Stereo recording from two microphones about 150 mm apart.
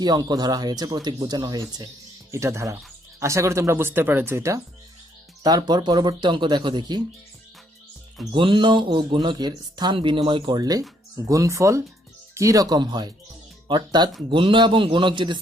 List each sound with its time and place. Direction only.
0.0 s speech: 30° right (ahead or behind)
8.3 s speech: 35° right (ahead or behind)